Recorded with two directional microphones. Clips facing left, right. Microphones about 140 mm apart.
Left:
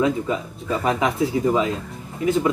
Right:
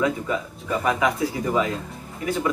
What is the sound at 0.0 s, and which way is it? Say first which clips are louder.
Speech: left 3 dB; 25° left (ahead or behind).